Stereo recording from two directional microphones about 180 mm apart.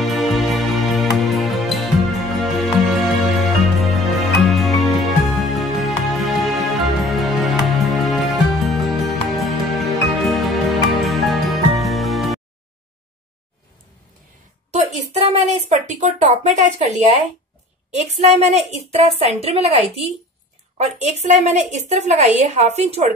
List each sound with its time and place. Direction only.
0.0 s music: centre (ahead or behind)
14.7 s a woman's voice: 35° right (ahead or behind)